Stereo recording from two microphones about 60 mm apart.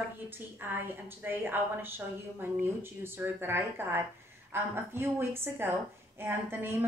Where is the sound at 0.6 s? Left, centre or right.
Right.